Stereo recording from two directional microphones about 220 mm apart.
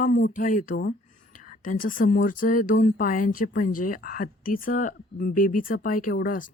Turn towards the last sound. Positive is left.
turn(degrees=40)  # may be behind; listen again after turning